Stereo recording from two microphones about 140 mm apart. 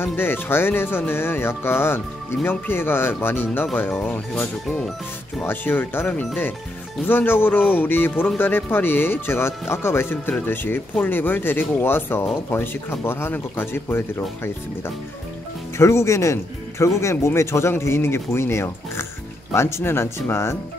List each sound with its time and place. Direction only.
0.0 s speech: 15° left (ahead or behind)
15.8 s speech: 20° left (ahead or behind)